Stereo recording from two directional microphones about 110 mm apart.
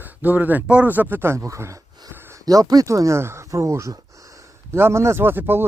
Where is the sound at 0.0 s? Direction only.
15° right (ahead or behind).